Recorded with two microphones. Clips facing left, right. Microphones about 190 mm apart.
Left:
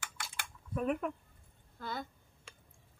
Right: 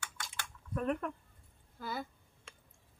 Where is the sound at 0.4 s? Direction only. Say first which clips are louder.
Left 1 dB; 5° left (ahead or behind).